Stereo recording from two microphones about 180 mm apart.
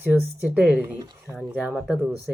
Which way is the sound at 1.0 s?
20° right (ahead or behind).